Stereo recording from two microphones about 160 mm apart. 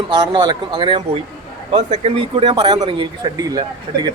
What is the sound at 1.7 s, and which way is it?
Speech, 40° right (ahead or behind).